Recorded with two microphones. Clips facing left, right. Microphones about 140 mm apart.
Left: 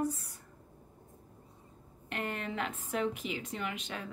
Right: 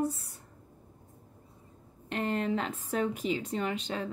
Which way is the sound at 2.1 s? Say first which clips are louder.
Right 7 dB; 30° right (ahead or behind).